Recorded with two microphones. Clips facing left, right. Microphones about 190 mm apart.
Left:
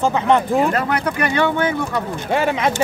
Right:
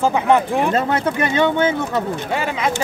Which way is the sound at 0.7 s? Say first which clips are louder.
Right 2 dB; 25° right (ahead or behind).